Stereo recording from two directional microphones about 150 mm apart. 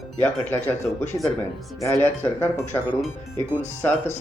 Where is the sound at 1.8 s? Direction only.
20° left (ahead or behind).